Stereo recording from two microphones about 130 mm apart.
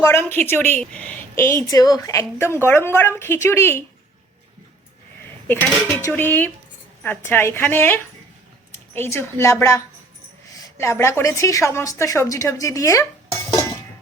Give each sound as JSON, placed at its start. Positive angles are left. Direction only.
{"t": 0.0, "sound": "a woman's voice", "side_deg": 20}
{"t": 5.5, "sound": "a woman's voice", "side_deg": 15}